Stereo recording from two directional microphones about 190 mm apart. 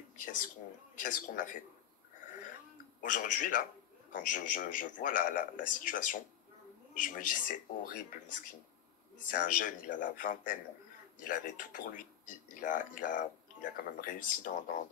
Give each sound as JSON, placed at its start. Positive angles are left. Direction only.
{"t": 0.9, "sound": "speech", "side_deg": 45}
{"t": 3.0, "sound": "speech", "side_deg": 45}